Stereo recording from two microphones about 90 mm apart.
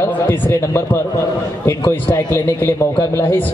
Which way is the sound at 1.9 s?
25° left (ahead or behind).